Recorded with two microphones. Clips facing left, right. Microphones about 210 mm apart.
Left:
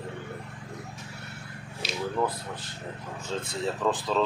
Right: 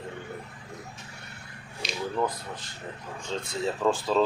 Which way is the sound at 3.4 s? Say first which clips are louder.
Right 2 dB; centre (ahead or behind).